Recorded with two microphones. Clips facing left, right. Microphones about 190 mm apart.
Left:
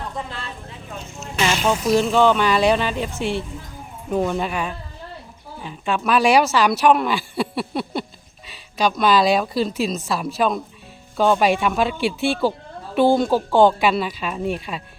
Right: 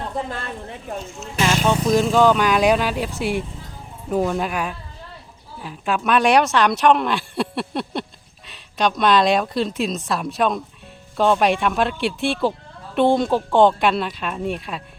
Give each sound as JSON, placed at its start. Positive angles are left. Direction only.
{"t": 0.3, "sound": "speech", "side_deg": -50}
{"t": 1.4, "sound": "speech", "side_deg": 0}
{"t": 4.1, "sound": "speech", "side_deg": -5}